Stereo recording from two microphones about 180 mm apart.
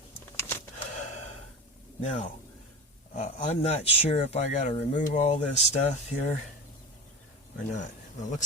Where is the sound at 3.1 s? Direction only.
35° left (ahead or behind).